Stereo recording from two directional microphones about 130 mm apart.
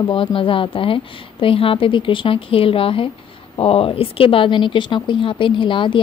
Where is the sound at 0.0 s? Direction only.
40° left (ahead or behind).